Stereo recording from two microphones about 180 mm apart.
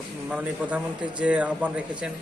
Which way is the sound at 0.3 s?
10° right (ahead or behind).